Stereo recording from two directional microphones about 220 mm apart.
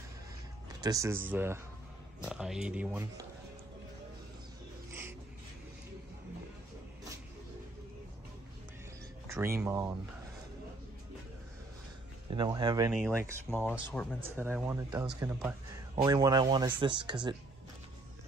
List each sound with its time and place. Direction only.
0.7 s speech: 15° right (ahead or behind)
9.3 s speech: 10° right (ahead or behind)
12.3 s speech: 20° right (ahead or behind)
14.0 s speech: 5° left (ahead or behind)
14.3 s speech: 10° right (ahead or behind)